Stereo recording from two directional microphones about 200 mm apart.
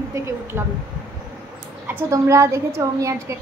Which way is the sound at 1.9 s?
15° right (ahead or behind).